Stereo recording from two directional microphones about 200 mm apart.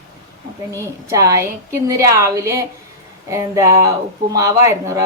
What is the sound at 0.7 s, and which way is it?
Speech, 15° right (ahead or behind).